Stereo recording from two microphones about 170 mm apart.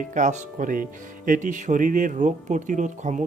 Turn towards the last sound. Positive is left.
turn(degrees=-45)  # may be behind; listen again after turning